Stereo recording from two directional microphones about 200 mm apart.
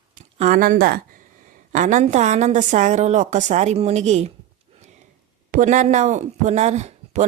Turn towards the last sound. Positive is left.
turn(degrees=-35)  # may be behind; listen again after turning